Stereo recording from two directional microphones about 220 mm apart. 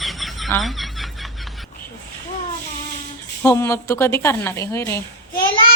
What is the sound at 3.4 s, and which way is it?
Speech, 10° left (ahead or behind).